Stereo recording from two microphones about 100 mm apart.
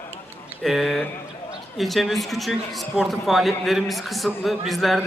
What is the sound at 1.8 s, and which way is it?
A man's voice, centre (ahead or behind).